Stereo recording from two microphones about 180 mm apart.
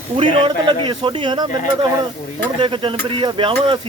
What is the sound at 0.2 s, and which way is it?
Speech, 30° right (ahead or behind).